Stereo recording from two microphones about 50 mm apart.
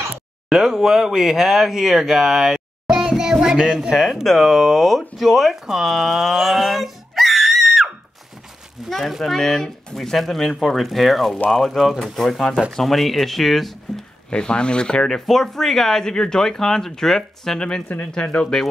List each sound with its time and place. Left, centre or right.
0.5 s speech: centre
3.9 s speech: centre
14.3 s speech: centre
17.8 s speech: left
18.1 s speech: left